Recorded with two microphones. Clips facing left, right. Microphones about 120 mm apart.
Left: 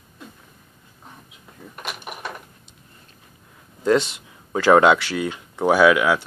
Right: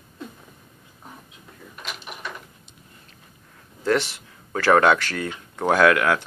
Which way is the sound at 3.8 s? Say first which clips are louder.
Left 3 dB; 20° left (ahead or behind).